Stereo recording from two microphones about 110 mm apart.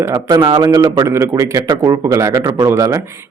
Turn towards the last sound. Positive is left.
turn(degrees=-30)  # may be behind; listen again after turning